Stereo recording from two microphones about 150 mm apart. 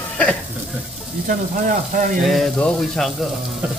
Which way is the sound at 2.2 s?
Centre (ahead or behind).